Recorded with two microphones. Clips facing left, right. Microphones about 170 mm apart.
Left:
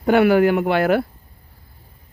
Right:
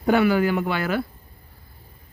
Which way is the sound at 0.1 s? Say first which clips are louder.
Left 5 dB; 65° left (ahead or behind).